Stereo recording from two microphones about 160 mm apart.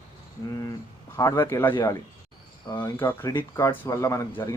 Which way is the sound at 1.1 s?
15° left (ahead or behind).